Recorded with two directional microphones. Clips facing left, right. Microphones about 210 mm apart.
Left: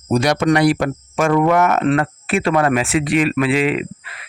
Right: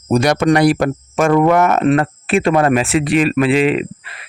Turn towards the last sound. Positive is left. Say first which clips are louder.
# right 3 dB
turn(degrees=-25)  # may be behind; listen again after turning